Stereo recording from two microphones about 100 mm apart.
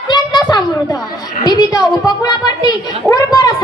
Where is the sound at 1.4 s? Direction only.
40° left (ahead or behind).